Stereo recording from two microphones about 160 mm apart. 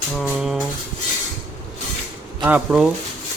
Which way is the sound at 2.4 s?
10° right (ahead or behind).